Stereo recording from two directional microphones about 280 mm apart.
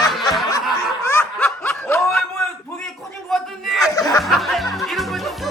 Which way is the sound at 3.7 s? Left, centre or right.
Centre.